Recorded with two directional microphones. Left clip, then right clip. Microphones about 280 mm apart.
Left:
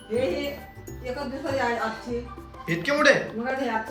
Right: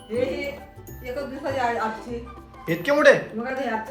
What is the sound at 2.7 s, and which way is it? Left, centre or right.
Speech, centre.